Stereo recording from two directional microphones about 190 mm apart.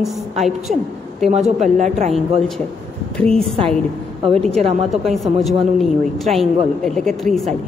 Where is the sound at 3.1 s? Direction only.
5° left (ahead or behind).